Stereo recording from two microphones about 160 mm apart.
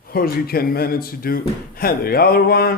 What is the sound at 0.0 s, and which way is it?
Speech, 65° left (ahead or behind).